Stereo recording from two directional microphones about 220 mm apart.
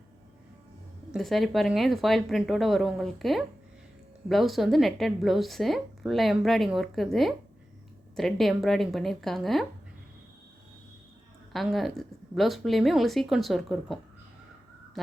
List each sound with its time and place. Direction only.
1.1 s a woman's voice: centre (ahead or behind)
11.5 s a woman's voice: centre (ahead or behind)
15.0 s a sound: centre (ahead or behind)